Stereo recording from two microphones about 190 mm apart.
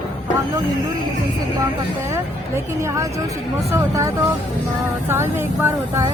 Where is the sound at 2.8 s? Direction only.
15° right (ahead or behind).